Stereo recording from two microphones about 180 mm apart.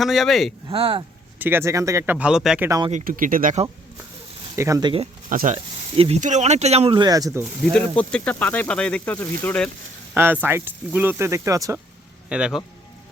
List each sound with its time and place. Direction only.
0.0 s speech: centre (ahead or behind)
0.7 s speech: 30° right (ahead or behind)
1.4 s speech: 10° right (ahead or behind)
2.6 s speech: 20° right (ahead or behind)
2.9 s speech: 50° right (ahead or behind)
4.5 s speech: 15° right (ahead or behind)
5.3 s speech: 50° right (ahead or behind)
6.0 s speech: 40° right (ahead or behind); by 7.4 s 20° right (ahead or behind)
7.7 s speech: 5° left (ahead or behind)
10.4 s speech: 10° right (ahead or behind)
12.3 s speech: 5° right (ahead or behind)